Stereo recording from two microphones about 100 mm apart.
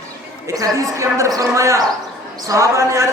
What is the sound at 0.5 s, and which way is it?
A woman's voice, 35° right (ahead or behind).